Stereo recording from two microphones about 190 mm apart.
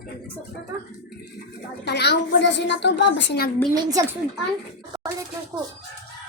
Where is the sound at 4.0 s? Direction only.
15° right (ahead or behind).